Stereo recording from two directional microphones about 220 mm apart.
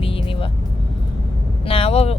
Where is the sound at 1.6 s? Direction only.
25° left (ahead or behind).